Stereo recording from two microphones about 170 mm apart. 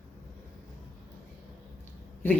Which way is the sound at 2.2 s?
10° left (ahead or behind).